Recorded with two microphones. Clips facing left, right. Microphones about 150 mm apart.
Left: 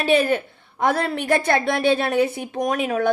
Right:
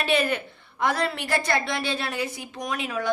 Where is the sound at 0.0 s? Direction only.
45° left (ahead or behind).